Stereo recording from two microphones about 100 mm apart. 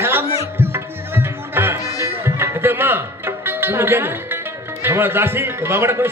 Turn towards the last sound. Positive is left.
turn(degrees=-25)  # may be behind; listen again after turning